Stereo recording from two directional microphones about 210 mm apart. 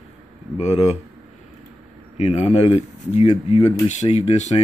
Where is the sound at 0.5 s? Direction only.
30° left (ahead or behind).